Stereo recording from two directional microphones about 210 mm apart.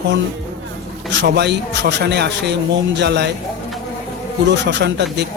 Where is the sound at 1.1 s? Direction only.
55° right (ahead or behind).